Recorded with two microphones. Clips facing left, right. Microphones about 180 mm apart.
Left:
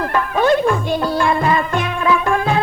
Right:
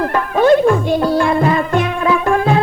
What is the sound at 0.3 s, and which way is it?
Music, 35° right (ahead or behind).